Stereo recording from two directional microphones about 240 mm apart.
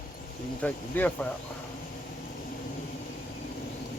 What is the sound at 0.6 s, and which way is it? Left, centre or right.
Speech, centre.